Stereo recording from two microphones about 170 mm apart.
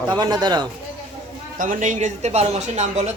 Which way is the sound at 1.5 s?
50° right (ahead or behind).